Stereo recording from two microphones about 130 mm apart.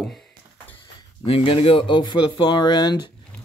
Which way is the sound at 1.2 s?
45° left (ahead or behind).